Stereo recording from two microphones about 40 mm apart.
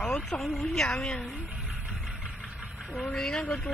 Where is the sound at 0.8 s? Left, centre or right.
Centre.